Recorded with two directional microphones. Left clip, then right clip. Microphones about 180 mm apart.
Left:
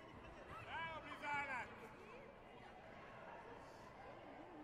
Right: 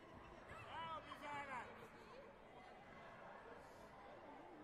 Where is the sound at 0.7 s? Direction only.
40° right (ahead or behind).